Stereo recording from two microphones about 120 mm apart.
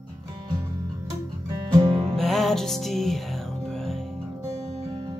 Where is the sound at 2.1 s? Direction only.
Centre (ahead or behind).